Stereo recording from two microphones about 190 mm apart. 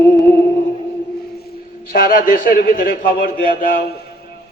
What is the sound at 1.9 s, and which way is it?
A man's voice, 50° left (ahead or behind).